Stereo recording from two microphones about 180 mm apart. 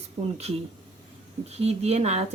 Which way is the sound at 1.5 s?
35° right (ahead or behind).